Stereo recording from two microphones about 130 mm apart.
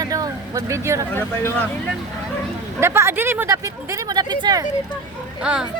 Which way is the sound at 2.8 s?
20° right (ahead or behind).